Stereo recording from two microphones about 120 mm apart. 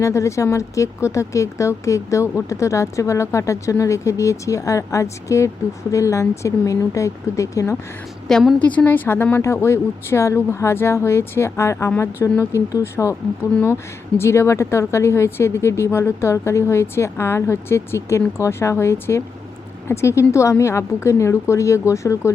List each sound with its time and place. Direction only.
0.0 s speech: 25° left (ahead or behind)
8.3 s a woman's voice: 5° left (ahead or behind); by 13.1 s 25° left (ahead or behind)
14.2 s speech: 20° left (ahead or behind)